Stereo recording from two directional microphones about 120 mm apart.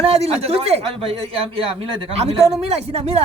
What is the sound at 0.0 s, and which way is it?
A man's voice, 55° right (ahead or behind).